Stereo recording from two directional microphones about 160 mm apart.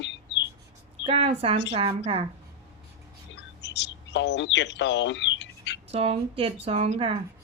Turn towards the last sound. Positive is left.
turn(degrees=-40)  # may be behind; listen again after turning